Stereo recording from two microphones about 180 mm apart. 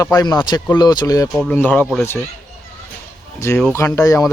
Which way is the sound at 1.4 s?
10° left (ahead or behind).